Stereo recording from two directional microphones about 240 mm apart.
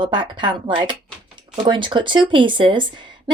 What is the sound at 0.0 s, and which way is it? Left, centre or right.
Speech, centre.